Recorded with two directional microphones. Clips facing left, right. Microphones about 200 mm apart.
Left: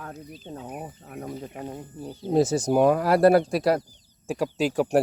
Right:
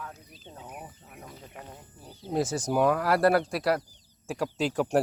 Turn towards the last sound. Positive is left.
turn(degrees=10)  # may be behind; listen again after turning